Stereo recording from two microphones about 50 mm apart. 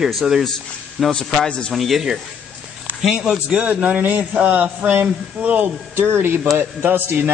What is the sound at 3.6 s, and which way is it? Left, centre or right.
A man's voice, right.